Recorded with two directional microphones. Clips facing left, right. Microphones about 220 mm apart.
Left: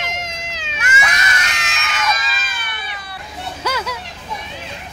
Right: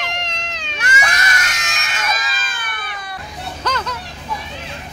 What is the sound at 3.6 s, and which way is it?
Hubbub, 10° left (ahead or behind).